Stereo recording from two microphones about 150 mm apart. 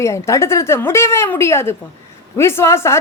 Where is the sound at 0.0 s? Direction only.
20° left (ahead or behind).